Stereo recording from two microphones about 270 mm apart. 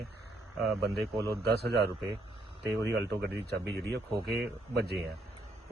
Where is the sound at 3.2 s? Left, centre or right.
Right.